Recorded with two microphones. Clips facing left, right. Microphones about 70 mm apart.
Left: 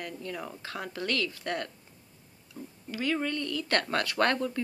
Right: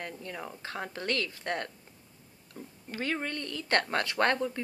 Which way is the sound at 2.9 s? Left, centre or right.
Right.